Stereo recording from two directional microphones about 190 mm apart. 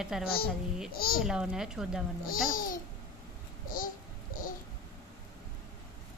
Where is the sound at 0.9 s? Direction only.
50° left (ahead or behind).